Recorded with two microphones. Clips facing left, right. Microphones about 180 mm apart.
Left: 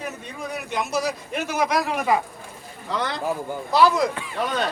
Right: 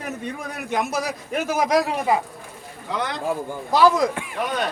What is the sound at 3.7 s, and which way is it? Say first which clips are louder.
Speech: right 1 dB; 45° right (ahead or behind).